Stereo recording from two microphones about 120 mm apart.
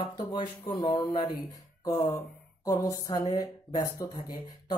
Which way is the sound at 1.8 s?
30° left (ahead or behind).